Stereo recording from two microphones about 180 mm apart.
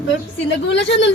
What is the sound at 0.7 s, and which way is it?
Speech, 80° left.